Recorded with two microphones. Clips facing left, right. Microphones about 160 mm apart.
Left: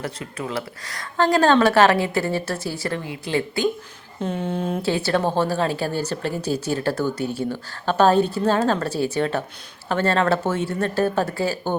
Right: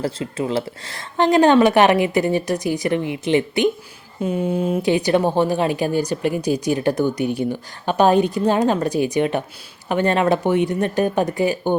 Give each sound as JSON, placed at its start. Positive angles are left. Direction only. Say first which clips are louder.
{"t": 0.0, "sound": "speech", "louder": "right 6 dB", "side_deg": -25}
{"t": 4.2, "sound": "a woman's voice", "louder": "right 4 dB", "side_deg": -10}